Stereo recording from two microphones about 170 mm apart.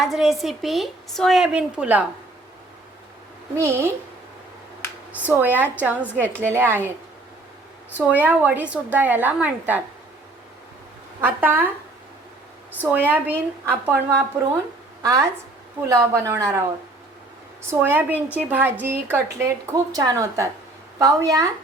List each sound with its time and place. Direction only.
0.0 s speech: centre (ahead or behind)
3.5 s a woman's voice: 15° right (ahead or behind)
5.1 s a woman's voice: 10° right (ahead or behind)
7.9 s a woman's voice: 10° right (ahead or behind)
11.2 s a woman's voice: 10° right (ahead or behind)
13.1 s a woman's voice: 10° right (ahead or behind)
17.7 s a woman's voice: 10° right (ahead or behind)